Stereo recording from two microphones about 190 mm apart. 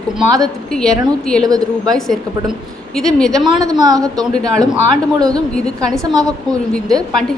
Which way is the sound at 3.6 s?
20° right (ahead or behind).